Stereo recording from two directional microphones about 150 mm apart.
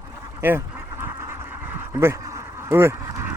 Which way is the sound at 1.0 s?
15° right (ahead or behind).